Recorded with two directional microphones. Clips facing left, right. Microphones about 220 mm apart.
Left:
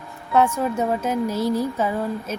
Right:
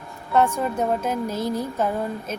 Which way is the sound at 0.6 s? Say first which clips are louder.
Left 1 dB; 5° left (ahead or behind).